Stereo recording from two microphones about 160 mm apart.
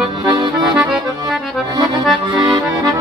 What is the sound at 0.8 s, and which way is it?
Accordion, 5° right (ahead or behind).